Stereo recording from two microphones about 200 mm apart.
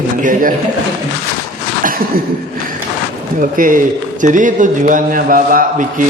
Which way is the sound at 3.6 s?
40° right (ahead or behind).